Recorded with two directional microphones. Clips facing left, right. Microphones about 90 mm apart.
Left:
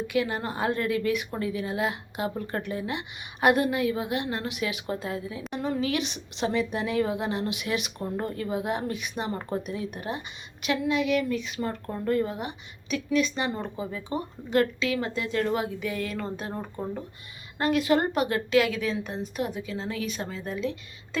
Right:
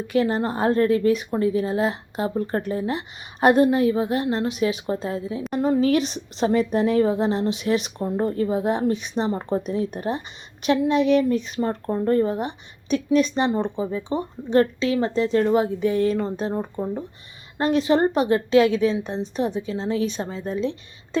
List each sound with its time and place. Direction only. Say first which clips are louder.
0.1 s a woman's voice: right 9 dB; 35° right (ahead or behind)